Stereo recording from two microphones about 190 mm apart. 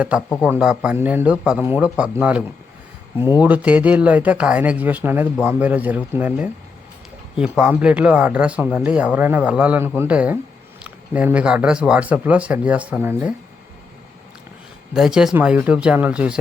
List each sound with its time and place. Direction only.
0.1 s speech: 5° right (ahead or behind)
3.4 s speech: 5° right (ahead or behind)
14.9 s speech: 5° right (ahead or behind)